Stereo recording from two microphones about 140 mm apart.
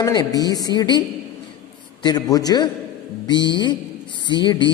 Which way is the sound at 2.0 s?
30° left (ahead or behind).